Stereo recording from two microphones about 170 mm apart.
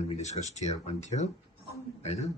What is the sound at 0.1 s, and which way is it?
Speech, 40° left (ahead or behind).